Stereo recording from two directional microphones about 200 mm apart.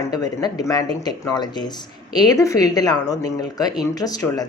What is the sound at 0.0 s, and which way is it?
A woman's voice, 15° left (ahead or behind).